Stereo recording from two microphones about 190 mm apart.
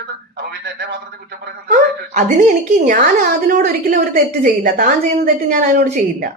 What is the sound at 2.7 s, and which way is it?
A woman's voice, 40° right (ahead or behind).